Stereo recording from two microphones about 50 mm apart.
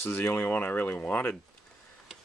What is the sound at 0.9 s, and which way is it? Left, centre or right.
Speech, left.